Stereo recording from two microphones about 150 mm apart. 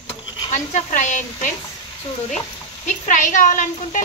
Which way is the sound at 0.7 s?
55° left (ahead or behind).